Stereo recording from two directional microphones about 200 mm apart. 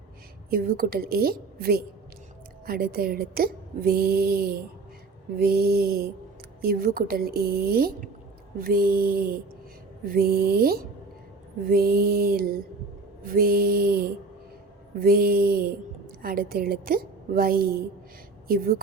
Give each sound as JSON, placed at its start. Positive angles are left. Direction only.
{"t": 0.5, "sound": "speech", "side_deg": -45}